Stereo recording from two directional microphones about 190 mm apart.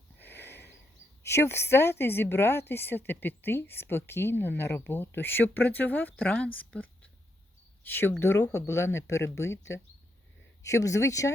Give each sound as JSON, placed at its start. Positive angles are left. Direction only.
{"t": 0.2, "sound": "a sound", "side_deg": 10}
{"t": 1.2, "sound": "a woman's voice", "side_deg": 15}
{"t": 7.9, "sound": "a woman's voice", "side_deg": 10}